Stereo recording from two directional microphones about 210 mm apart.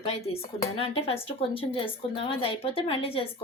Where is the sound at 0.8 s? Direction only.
30° left (ahead or behind).